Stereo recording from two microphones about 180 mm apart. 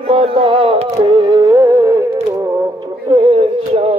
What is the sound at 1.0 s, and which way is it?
Music, 25° right (ahead or behind).